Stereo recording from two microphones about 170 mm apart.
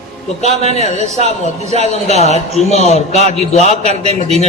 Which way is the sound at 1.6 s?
40° right (ahead or behind).